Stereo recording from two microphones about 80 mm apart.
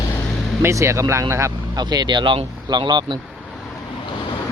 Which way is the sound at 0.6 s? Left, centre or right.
Right.